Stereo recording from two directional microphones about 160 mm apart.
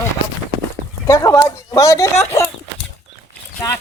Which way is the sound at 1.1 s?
20° left (ahead or behind).